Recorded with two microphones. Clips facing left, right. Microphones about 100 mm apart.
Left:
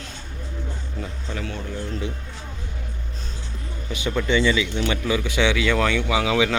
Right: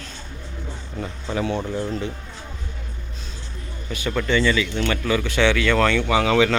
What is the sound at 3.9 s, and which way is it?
Speech, 20° left (ahead or behind).